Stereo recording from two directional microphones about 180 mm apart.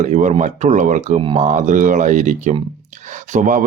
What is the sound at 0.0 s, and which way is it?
Speech, 40° right (ahead or behind).